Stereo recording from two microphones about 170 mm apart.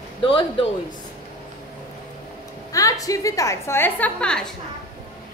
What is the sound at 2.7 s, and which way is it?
A woman's voice, 20° left (ahead or behind).